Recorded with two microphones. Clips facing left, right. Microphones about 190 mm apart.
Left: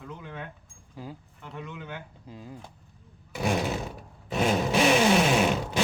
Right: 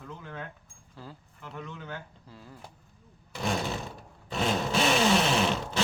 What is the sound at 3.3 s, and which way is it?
Roar, 10° left (ahead or behind).